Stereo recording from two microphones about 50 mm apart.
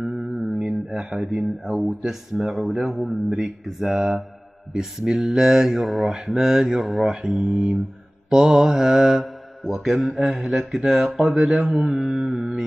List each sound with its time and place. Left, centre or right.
0.0 s mantra: centre
1.2 s speech: centre
3.3 s mantra: centre
6.8 s speech: centre
7.2 s mantra: centre
10.9 s speech: centre
12.0 s mantra: centre
12.3 s music: right